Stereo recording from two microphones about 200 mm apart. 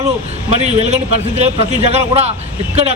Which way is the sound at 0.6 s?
35° right (ahead or behind).